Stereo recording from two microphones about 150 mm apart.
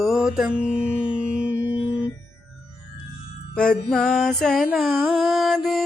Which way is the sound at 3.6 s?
5° left (ahead or behind).